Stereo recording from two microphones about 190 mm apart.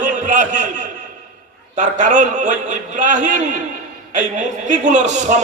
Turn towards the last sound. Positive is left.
turn(degrees=-40)  # may be behind; listen again after turning